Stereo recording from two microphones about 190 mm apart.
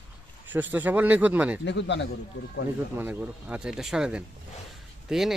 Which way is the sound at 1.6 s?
70° left (ahead or behind).